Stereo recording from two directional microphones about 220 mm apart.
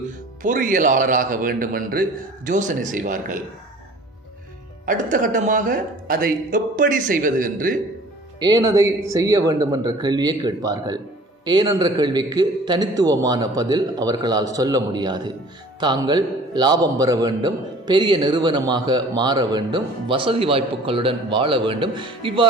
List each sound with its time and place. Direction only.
0.0 s speech: 35° right (ahead or behind)
4.9 s speech: 40° right (ahead or behind)
8.4 s a man's voice: 20° right (ahead or behind)